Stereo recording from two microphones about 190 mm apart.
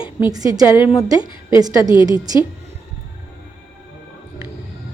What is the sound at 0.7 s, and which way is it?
Speech, 25° left (ahead or behind).